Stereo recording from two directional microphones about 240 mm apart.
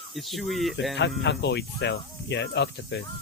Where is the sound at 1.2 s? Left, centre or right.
Left.